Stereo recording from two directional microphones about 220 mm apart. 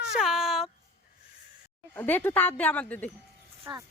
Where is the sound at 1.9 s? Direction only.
10° left (ahead or behind).